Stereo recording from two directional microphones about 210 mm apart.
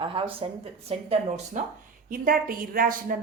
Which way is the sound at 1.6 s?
35° right (ahead or behind).